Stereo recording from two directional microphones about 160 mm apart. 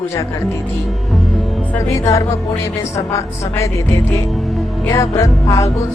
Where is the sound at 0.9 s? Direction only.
Centre (ahead or behind); by 4.2 s 20° left (ahead or behind).